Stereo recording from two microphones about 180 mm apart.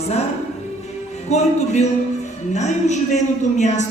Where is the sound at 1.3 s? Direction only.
40° left (ahead or behind).